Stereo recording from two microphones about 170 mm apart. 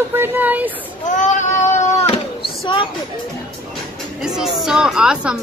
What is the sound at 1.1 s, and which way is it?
Child singing, 45° left (ahead or behind).